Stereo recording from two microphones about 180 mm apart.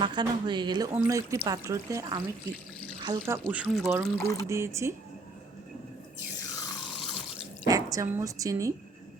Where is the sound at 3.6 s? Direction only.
Centre (ahead or behind).